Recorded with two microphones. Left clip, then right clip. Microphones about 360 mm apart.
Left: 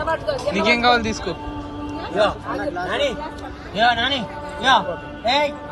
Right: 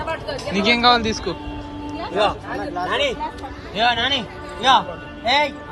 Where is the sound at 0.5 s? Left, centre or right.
Centre.